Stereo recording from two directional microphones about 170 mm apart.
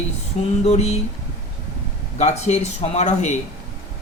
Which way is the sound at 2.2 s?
40° left (ahead or behind).